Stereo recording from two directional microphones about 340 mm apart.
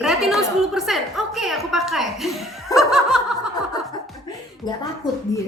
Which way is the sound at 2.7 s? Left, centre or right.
Centre.